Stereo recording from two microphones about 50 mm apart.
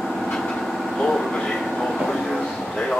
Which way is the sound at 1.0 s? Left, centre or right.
Centre.